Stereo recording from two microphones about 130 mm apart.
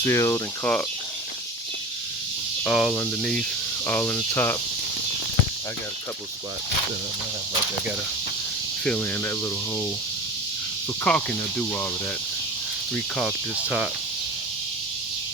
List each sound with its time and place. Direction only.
0.0 s speech: 20° left (ahead or behind)
2.6 s cricket: 5° left (ahead or behind)
3.8 s speech: 20° left (ahead or behind)
8.8 s speech: 10° left (ahead or behind)
11.0 s speech: 10° left (ahead or behind)
13.1 s cricket: 5° left (ahead or behind)